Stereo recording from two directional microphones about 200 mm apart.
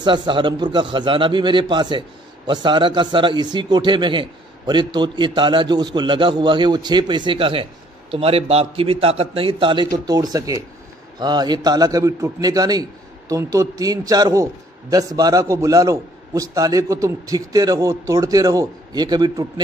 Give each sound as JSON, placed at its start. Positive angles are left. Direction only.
{"t": 0.0, "sound": "a man's voice", "side_deg": -25}